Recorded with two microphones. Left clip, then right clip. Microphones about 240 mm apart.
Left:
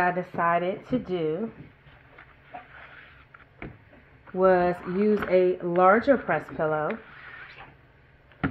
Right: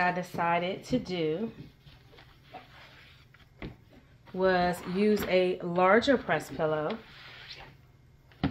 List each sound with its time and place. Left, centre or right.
0.0 s speech: centre
4.4 s speech: left